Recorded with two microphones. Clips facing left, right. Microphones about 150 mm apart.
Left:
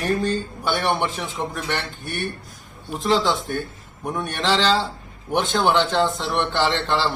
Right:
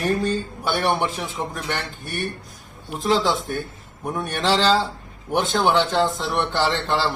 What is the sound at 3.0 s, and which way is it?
Speech, 5° right (ahead or behind).